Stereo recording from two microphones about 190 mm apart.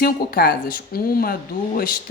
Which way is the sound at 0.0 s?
50° left (ahead or behind).